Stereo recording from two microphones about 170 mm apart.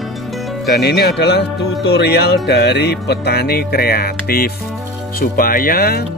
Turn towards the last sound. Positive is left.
turn(degrees=65)  # may be behind; listen again after turning